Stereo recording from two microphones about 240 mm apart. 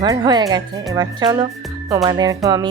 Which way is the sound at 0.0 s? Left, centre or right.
Centre.